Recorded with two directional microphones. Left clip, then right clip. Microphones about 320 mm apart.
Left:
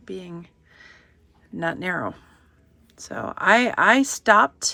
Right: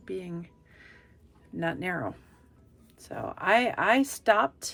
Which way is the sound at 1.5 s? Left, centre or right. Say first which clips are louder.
Left 5 dB; centre.